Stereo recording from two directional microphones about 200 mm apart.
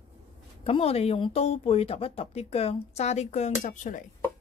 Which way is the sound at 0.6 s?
30° left (ahead or behind).